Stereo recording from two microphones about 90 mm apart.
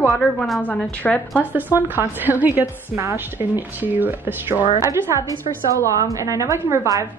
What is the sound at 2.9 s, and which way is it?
Speech, 30° right (ahead or behind).